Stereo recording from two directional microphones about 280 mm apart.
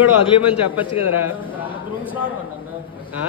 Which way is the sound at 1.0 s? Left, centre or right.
Left.